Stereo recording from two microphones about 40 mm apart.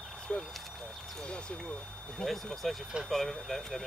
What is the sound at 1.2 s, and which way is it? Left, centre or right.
Speech, left.